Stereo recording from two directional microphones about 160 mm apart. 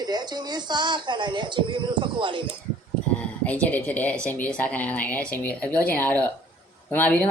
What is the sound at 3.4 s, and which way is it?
Speech, 10° left (ahead or behind).